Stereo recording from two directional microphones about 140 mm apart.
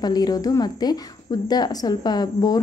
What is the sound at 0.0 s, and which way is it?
A woman's voice, 30° left (ahead or behind).